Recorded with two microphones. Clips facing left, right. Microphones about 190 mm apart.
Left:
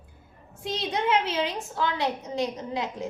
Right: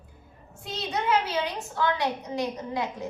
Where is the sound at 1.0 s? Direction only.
25° left (ahead or behind).